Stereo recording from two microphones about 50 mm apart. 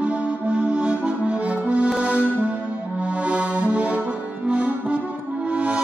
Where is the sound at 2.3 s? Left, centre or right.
Right.